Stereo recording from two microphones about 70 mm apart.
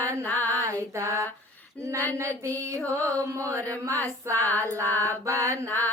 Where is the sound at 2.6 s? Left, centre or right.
Right.